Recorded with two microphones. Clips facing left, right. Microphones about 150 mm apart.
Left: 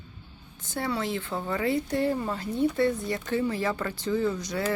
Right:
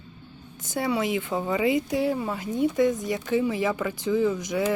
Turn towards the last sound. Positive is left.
turn(degrees=-15)  # may be behind; listen again after turning